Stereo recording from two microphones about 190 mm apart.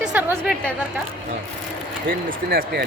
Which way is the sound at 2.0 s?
50° right (ahead or behind).